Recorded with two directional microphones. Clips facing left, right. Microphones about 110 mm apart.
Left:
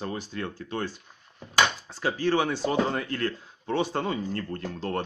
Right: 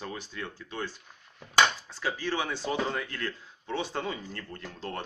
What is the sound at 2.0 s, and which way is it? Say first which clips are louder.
Speech: left 7 dB; 50° left (ahead or behind).